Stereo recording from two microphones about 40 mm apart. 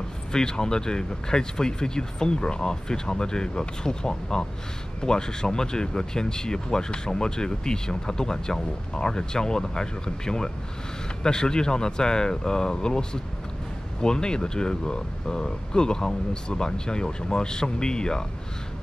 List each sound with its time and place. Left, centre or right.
0.3 s speech: centre